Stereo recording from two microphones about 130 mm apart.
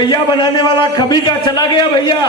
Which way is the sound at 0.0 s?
35° left (ahead or behind).